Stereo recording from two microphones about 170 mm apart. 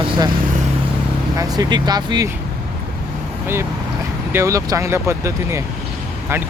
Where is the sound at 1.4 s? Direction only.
20° right (ahead or behind).